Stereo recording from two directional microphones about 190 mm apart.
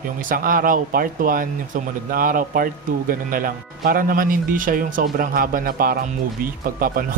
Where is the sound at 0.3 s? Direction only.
45° right (ahead or behind).